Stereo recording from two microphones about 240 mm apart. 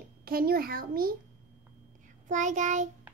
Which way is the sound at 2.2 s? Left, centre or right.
Right.